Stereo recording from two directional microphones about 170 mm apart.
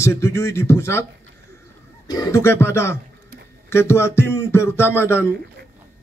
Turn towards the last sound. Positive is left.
turn(degrees=15)  # may be behind; listen again after turning